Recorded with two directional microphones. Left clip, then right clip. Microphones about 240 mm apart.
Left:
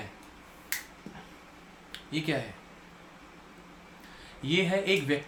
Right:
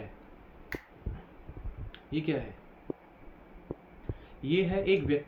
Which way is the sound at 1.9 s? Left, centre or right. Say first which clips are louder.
Left 1 dB; centre.